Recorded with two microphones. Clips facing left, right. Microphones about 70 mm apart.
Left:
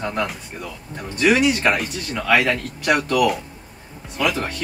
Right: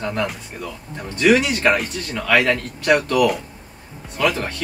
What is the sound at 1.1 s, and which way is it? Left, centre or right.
Speech, centre.